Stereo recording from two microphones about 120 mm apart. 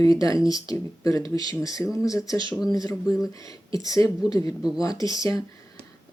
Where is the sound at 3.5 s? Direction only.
30° left (ahead or behind).